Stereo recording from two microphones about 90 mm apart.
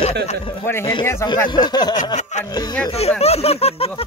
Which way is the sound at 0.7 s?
25° left (ahead or behind).